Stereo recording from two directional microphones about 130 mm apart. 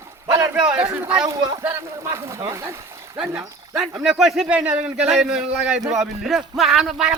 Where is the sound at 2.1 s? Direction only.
20° right (ahead or behind).